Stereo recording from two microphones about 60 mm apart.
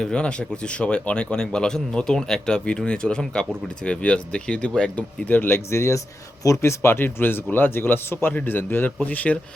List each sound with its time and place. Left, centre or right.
0.0 s speech: centre
4.9 s a man's voice: left
5.5 s speech: left
6.6 s a man's voice: left